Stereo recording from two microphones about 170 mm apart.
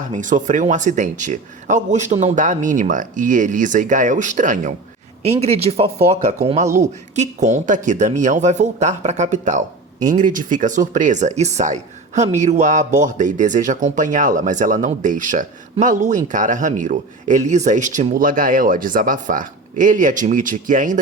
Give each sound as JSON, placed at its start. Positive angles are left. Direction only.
{"t": 0.1, "sound": "speech", "side_deg": -50}
{"t": 5.4, "sound": "speech", "side_deg": -35}